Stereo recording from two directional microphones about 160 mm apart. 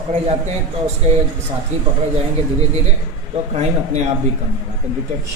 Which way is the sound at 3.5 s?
45° right (ahead or behind).